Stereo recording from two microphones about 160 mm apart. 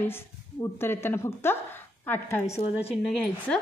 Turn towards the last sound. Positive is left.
turn(degrees=5)  # may be behind; listen again after turning